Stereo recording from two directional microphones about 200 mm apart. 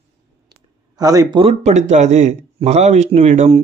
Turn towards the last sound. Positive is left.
turn(degrees=-30)  # may be behind; listen again after turning